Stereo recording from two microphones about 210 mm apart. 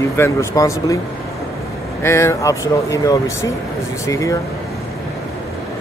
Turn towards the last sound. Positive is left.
turn(degrees=15)  # may be behind; listen again after turning